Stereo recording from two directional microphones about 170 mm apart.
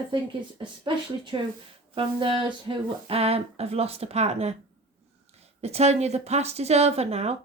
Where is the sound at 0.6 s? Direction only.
30° right (ahead or behind).